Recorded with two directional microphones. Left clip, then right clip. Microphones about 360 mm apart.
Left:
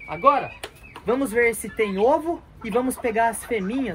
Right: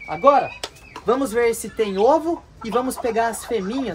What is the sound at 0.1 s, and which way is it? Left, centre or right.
Speech, centre.